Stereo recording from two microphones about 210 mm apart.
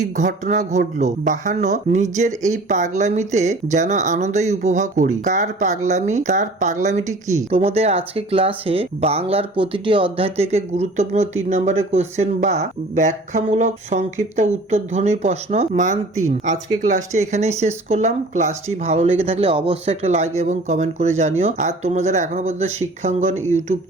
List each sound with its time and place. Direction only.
0.0 s speech: 35° right (ahead or behind)